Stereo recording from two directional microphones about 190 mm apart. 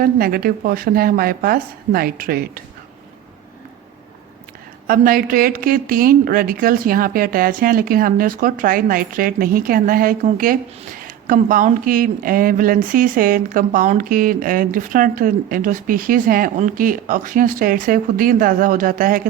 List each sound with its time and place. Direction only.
0.0 s a woman's voice: 50° right (ahead or behind)
4.9 s a woman's voice: 50° right (ahead or behind)